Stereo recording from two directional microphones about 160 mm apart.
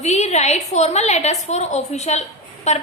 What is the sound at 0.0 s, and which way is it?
A woman's voice, 45° left (ahead or behind).